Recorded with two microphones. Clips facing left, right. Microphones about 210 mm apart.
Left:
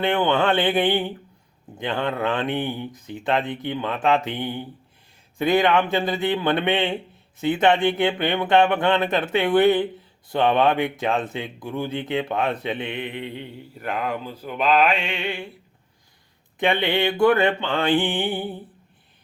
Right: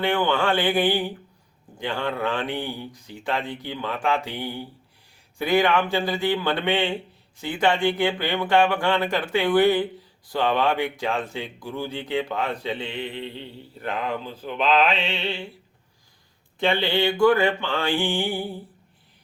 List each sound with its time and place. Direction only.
0.0 s speech: 20° left (ahead or behind)
13.8 s a sound: 10° left (ahead or behind)
16.6 s speech: 20° left (ahead or behind)